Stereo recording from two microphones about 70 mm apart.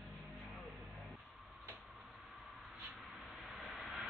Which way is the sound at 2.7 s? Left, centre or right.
Centre.